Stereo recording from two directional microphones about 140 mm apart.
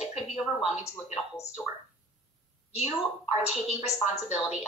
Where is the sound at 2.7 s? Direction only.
50° left (ahead or behind).